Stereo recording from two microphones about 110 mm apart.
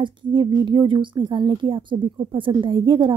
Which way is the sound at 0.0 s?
45° right (ahead or behind).